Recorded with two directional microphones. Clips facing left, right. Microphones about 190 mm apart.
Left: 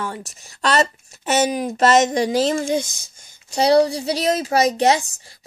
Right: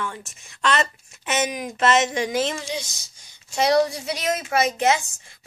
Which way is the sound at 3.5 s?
35° left (ahead or behind).